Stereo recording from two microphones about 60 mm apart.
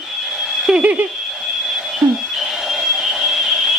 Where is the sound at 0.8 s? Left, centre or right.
Right.